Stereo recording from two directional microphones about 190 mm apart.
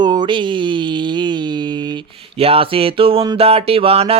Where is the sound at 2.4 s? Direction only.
30° right (ahead or behind).